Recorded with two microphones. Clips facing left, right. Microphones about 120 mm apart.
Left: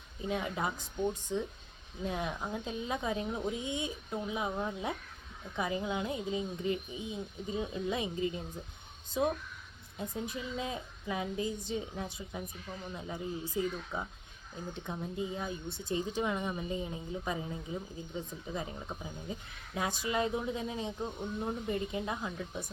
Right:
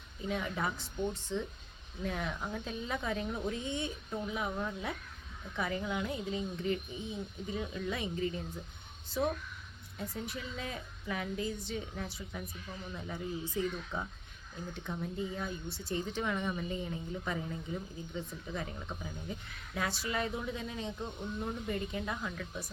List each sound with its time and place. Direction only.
0.3 s a woman's voice: 20° left (ahead or behind)